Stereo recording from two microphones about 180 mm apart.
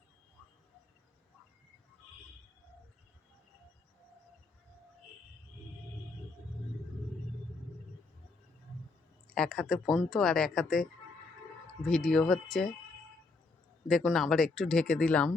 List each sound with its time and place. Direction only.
9.3 s speech: 5° left (ahead or behind)
11.9 s speech: 5° left (ahead or behind)
13.8 s speech: centre (ahead or behind)